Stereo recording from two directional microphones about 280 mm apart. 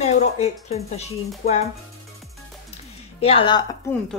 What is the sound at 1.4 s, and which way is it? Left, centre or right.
Speech, left.